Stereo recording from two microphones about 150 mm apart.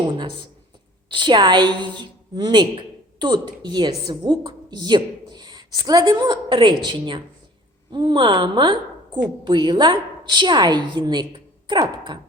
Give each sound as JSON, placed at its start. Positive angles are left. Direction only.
{"t": 1.1, "sound": "a woman's voice", "side_deg": -30}